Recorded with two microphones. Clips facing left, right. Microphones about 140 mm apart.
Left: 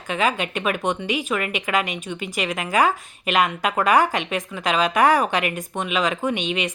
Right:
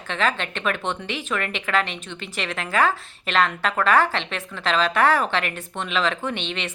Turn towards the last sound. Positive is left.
turn(degrees=10)  # may be behind; listen again after turning